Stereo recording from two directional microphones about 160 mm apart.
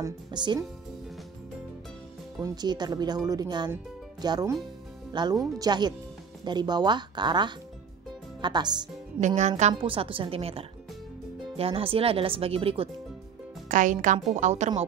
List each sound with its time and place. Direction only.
0.0 s speech: 30° right (ahead or behind)
2.4 s speech: 25° right (ahead or behind)
9.2 s a woman's voice: 45° right (ahead or behind)
13.7 s speech: 55° right (ahead or behind)